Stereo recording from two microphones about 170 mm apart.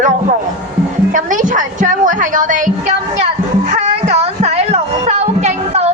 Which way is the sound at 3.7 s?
40° right (ahead or behind).